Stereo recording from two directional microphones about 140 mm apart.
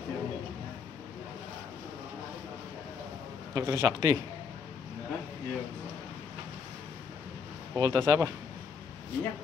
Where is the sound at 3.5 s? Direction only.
20° right (ahead or behind).